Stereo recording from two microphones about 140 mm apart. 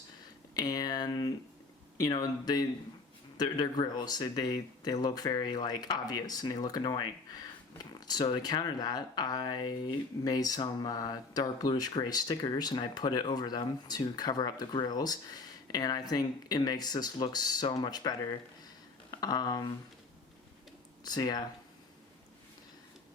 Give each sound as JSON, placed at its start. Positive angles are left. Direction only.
{"t": 0.5, "sound": "speech", "side_deg": 30}
{"t": 21.0, "sound": "speech", "side_deg": 30}